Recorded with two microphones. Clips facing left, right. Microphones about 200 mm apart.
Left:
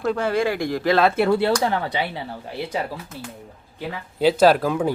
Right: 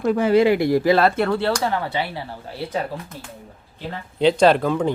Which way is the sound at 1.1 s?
10° left (ahead or behind).